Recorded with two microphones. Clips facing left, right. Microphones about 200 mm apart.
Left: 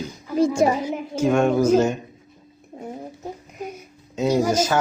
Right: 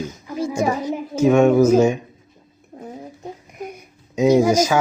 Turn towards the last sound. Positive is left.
turn(degrees=-10)  # may be behind; listen again after turning